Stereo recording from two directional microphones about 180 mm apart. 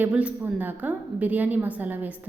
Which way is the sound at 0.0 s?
5° right (ahead or behind).